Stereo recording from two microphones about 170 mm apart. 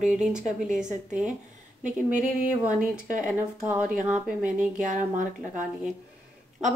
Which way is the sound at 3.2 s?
10° right (ahead or behind).